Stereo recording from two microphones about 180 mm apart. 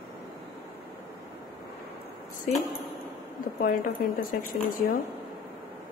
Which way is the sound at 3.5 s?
55° left (ahead or behind).